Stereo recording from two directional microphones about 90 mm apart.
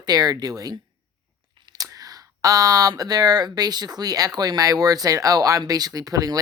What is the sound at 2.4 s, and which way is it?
Speech, 40° right (ahead or behind).